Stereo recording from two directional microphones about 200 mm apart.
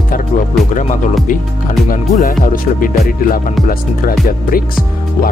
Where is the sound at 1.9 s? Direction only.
45° left (ahead or behind).